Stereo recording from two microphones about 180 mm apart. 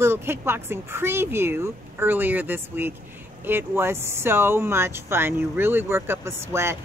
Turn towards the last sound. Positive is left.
turn(degrees=-15)  # may be behind; listen again after turning